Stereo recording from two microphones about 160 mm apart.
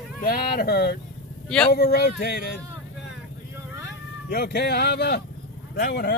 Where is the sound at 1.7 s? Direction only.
85° left.